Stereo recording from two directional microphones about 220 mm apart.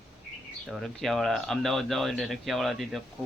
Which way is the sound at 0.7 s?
Centre (ahead or behind).